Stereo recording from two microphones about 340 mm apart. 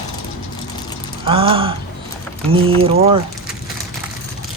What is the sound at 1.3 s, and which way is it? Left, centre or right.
Speech, centre.